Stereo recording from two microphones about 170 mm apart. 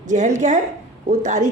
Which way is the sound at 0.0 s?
45° right (ahead or behind).